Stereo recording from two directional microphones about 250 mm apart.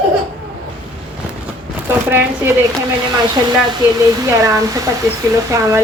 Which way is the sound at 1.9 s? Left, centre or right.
Centre.